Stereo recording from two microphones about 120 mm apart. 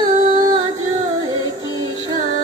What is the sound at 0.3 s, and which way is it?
Music, 40° right (ahead or behind).